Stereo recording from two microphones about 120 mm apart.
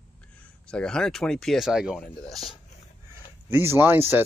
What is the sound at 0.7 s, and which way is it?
Speech, 5° left (ahead or behind).